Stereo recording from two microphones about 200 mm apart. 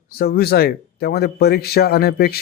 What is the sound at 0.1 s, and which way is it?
Speech, 50° left (ahead or behind).